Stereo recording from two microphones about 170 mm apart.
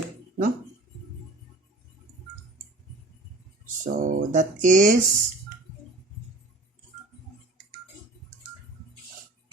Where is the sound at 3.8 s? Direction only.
50° right (ahead or behind).